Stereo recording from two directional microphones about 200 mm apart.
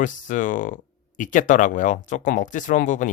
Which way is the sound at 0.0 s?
40° left (ahead or behind).